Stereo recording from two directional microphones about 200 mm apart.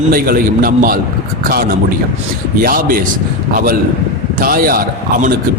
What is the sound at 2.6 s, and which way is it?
Speech, 45° right (ahead or behind).